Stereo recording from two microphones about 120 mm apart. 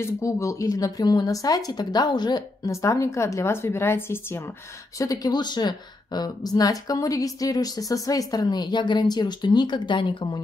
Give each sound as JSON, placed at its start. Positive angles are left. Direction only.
{"t": 0.0, "sound": "a woman's voice", "side_deg": 25}
{"t": 2.7, "sound": "a woman's voice", "side_deg": 25}